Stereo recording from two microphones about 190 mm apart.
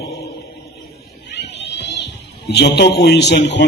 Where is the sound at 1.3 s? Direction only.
65° left (ahead or behind).